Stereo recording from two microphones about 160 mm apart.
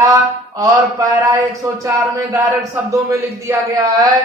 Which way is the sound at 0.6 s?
20° right (ahead or behind).